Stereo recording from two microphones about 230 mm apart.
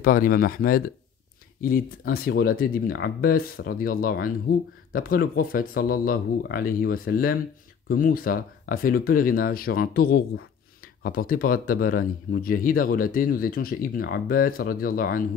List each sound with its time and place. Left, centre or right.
0.0 s speech: left